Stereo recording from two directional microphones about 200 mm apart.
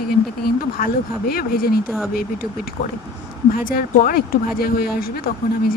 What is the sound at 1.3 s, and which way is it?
Speech, 50° left (ahead or behind).